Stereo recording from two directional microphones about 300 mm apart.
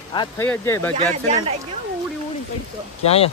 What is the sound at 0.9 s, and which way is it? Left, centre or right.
Speech, centre.